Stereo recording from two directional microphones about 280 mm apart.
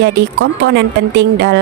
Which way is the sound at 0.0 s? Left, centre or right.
Right.